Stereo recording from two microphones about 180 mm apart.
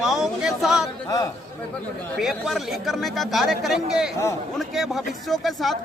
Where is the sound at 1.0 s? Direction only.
20° left (ahead or behind).